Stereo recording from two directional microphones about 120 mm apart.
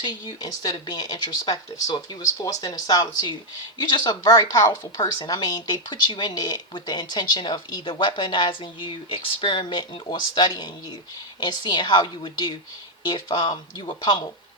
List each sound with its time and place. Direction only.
0.0 s a woman's voice: 35° left (ahead or behind)